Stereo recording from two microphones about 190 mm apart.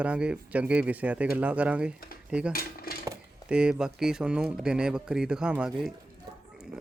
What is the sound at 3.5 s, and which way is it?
Speech, 5° right (ahead or behind).